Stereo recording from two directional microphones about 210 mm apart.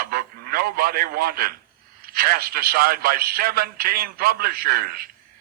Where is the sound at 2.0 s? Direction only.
45° right (ahead or behind).